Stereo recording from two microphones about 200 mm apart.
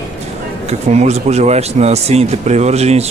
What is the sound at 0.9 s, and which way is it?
Speech, 35° right (ahead or behind).